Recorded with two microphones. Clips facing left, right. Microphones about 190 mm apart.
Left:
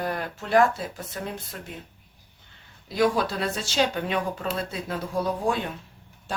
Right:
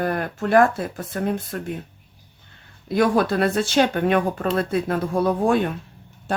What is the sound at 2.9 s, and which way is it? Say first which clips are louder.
Speech: right 4 dB; 55° right (ahead or behind).